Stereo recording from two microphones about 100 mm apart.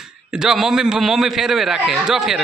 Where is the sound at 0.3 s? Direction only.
5° right (ahead or behind).